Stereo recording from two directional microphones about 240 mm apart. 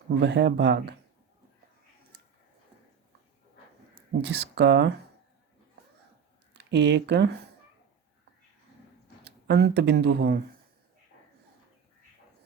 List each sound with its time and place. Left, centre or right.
0.2 s speech: right
4.2 s speech: right
6.5 s speech: right
9.2 s speech: right